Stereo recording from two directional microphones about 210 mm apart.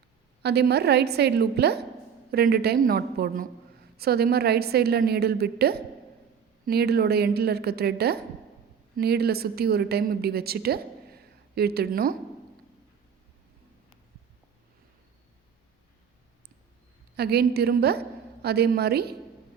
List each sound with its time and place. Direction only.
0.4 s a woman's voice: 50° right (ahead or behind)
17.2 s a woman's voice: 50° right (ahead or behind)